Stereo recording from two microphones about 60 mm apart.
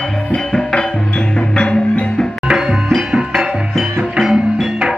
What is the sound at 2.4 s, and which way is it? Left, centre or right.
Music, centre.